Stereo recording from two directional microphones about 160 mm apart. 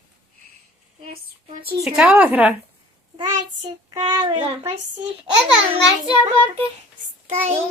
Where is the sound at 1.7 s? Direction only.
Centre (ahead or behind).